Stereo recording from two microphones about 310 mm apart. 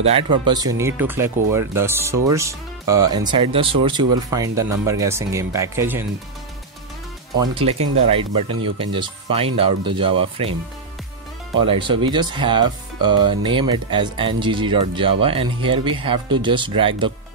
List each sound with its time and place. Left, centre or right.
0.0 s speech: centre
7.3 s speech: centre
11.9 s speech: centre